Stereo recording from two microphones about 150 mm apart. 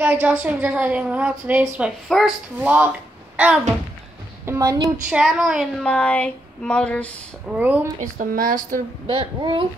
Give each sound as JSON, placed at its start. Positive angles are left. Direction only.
{"t": 0.0, "sound": "a woman's voice", "side_deg": -10}
{"t": 4.5, "sound": "a woman's voice", "side_deg": -25}
{"t": 5.1, "sound": "speech", "side_deg": -5}
{"t": 7.4, "sound": "a woman's voice", "side_deg": -10}
{"t": 8.0, "sound": "speech", "side_deg": -65}
{"t": 9.0, "sound": "speech", "side_deg": -35}